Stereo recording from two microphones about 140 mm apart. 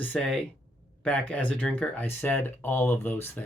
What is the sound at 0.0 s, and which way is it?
Speech, 10° left (ahead or behind).